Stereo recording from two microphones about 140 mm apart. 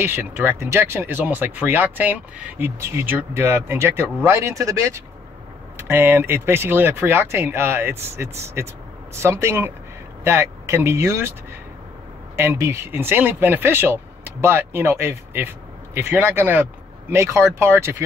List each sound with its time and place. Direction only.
0.0 s speech: 15° right (ahead or behind)
12.4 s speech: 20° right (ahead or behind)